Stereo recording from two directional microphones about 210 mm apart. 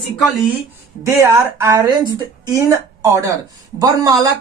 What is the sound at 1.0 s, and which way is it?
Speech, 15° right (ahead or behind).